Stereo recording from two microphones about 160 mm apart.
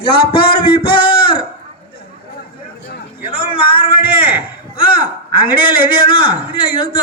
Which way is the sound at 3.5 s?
35° left (ahead or behind).